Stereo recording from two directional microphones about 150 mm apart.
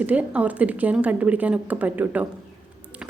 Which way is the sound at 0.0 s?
10° right (ahead or behind).